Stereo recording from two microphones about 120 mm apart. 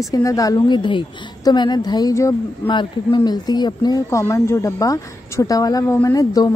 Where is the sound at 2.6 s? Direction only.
40° left (ahead or behind).